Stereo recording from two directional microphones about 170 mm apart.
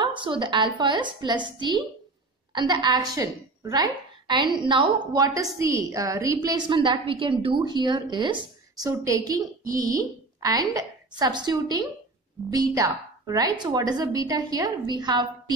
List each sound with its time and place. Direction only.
0.0 s a woman's voice: 30° right (ahead or behind)